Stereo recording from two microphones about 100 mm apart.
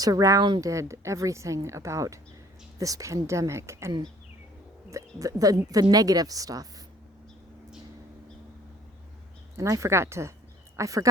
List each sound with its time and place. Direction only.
0.0 s a woman's voice: 35° right (ahead or behind)
9.6 s a woman's voice: 30° right (ahead or behind)